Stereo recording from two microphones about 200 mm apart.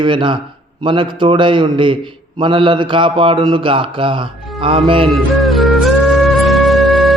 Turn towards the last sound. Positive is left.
turn(degrees=0)  # may be behind; listen again after turning